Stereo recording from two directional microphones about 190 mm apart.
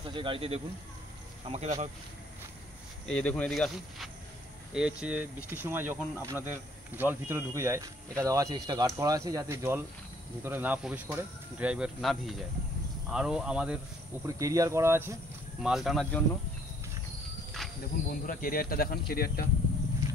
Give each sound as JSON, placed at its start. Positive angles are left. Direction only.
{"t": 0.0, "sound": "speech", "side_deg": -25}
{"t": 3.1, "sound": "speech", "side_deg": 5}
{"t": 14.2, "sound": "speech", "side_deg": -15}
{"t": 15.6, "sound": "speech", "side_deg": 0}
{"t": 17.6, "sound": "insect", "side_deg": 0}
{"t": 18.0, "sound": "speech", "side_deg": 45}